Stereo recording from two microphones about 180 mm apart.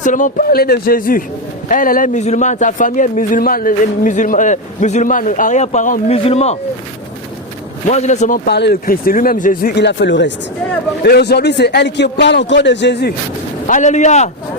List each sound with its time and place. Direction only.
0.0 s a man's voice: 45° left (ahead or behind)
7.9 s speech: 40° left (ahead or behind)
8.4 s speech: 65° left (ahead or behind)
11.0 s a man's voice: 65° left (ahead or behind)
13.7 s a man's voice: 45° left (ahead or behind)